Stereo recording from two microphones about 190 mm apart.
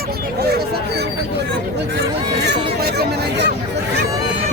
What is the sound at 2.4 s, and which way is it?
Speech, 60° right (ahead or behind).